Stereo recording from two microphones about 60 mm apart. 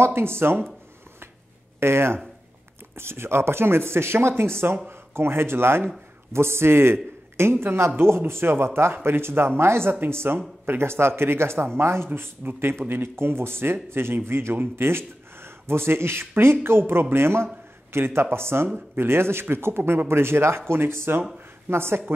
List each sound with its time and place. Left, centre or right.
0.0 s speech: right
1.8 s speech: right